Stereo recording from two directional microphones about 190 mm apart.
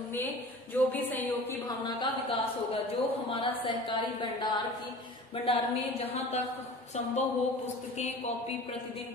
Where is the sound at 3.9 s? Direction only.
25° left (ahead or behind).